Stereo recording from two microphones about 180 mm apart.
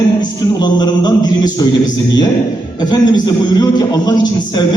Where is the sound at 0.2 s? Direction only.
25° left (ahead or behind).